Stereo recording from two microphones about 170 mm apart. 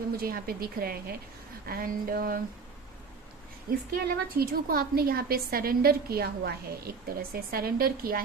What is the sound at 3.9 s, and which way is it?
A woman's voice, 65° right (ahead or behind).